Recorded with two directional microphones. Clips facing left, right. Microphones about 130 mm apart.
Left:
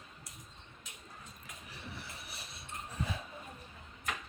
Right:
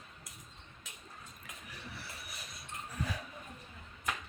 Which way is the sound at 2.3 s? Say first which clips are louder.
Even; 30° left (ahead or behind).